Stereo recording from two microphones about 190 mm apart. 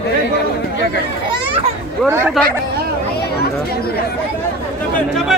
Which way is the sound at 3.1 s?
55° left (ahead or behind).